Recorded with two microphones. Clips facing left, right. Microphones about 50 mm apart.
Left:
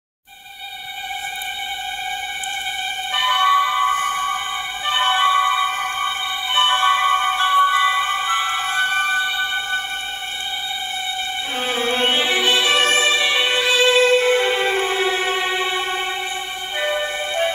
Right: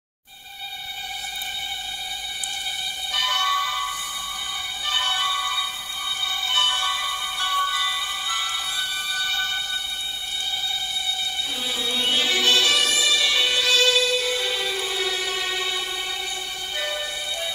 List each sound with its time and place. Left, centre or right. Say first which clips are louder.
3.1 s music: left 7 dB; left
3.9 s music: left 12 dB; left
4.8 s music: left 8 dB; left
9.2 s music: left 5 dB; left
11.6 s music: left 7 dB; left
12.2 s music: left 3 dB; left